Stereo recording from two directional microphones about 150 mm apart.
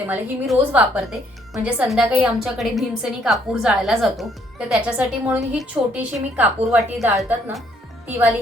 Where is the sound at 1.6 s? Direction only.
10° right (ahead or behind).